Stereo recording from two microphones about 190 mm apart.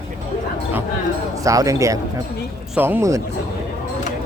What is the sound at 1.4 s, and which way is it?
Speech, 15° right (ahead or behind).